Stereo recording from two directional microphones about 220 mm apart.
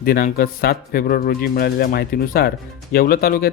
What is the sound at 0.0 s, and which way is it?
Speech, 40° left (ahead or behind).